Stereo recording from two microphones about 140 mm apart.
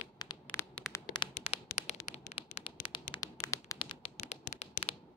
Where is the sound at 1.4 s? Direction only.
50° left (ahead or behind); by 4.1 s 35° left (ahead or behind).